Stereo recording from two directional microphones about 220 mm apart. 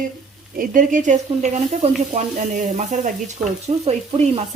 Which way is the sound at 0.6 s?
35° right (ahead or behind).